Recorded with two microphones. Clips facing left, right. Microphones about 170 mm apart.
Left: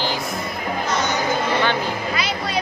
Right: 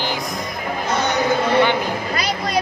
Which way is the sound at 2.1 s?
40° right (ahead or behind).